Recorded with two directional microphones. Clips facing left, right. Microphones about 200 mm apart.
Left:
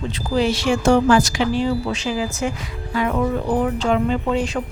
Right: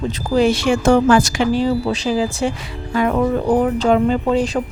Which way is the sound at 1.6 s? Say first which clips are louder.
Right 3 dB; 35° right (ahead or behind).